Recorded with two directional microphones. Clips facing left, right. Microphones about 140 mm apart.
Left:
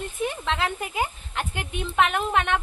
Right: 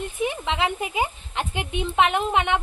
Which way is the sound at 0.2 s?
15° right (ahead or behind).